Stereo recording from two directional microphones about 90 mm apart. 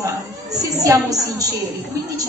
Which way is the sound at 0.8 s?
40° right (ahead or behind).